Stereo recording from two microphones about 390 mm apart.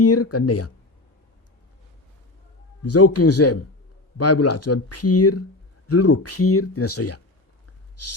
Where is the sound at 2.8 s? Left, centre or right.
Left.